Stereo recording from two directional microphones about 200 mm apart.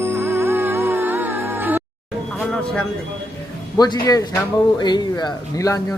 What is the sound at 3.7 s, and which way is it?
Speech, 20° left (ahead or behind).